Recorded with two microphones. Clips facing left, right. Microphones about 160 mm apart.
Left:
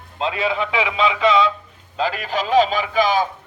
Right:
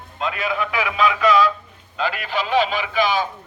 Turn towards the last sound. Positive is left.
turn(degrees=45)  # may be behind; listen again after turning